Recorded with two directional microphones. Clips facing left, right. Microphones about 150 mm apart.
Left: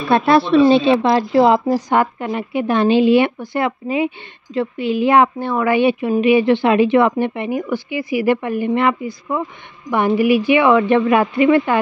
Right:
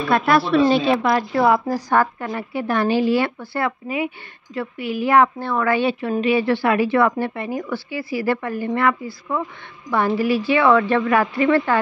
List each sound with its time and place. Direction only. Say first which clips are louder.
0.1 s a woman's voice: left 4 dB; 25° left (ahead or behind)